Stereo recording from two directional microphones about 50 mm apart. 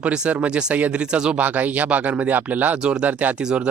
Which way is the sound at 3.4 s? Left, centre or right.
Centre.